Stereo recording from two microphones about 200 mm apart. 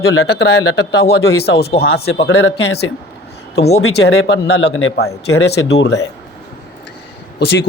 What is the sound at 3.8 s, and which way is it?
A man's voice, 60° left (ahead or behind).